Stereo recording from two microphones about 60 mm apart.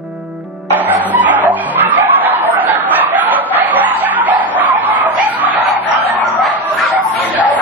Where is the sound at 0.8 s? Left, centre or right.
Right.